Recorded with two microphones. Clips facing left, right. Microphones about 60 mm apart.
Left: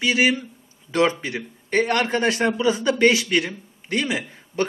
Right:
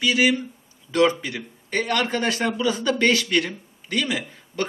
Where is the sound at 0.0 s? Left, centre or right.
Left; by 3.5 s centre.